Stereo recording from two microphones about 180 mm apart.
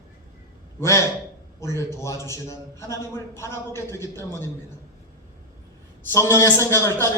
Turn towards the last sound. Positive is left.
turn(degrees=15)  # may be behind; listen again after turning